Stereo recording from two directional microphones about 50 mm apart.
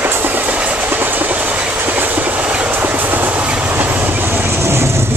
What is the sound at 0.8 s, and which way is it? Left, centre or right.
Train, right.